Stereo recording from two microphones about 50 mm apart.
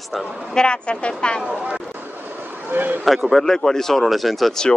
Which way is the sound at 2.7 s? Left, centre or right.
Right.